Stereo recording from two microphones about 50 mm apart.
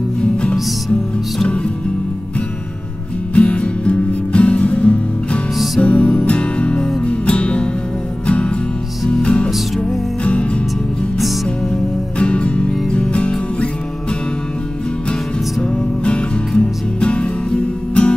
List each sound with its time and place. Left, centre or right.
0.2 s music: left
3.3 s music: left
12.2 s music: left
16.0 s music: left